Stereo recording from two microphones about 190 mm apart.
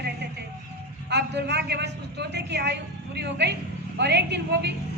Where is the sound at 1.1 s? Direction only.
60° right (ahead or behind).